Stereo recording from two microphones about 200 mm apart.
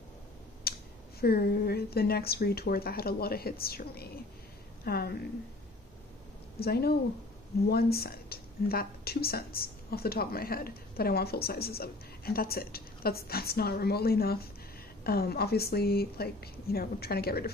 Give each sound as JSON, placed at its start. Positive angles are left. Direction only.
{"t": 0.7, "sound": "a sound", "side_deg": 50}
{"t": 1.2, "sound": "a woman's voice", "side_deg": 50}
{"t": 6.6, "sound": "speech", "side_deg": 50}